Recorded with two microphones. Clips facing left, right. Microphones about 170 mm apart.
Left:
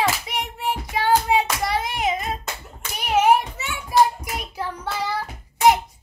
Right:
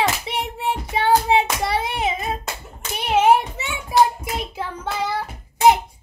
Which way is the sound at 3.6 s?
25° right (ahead or behind).